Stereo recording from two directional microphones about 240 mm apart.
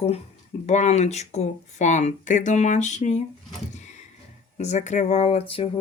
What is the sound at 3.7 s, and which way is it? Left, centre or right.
Door, left.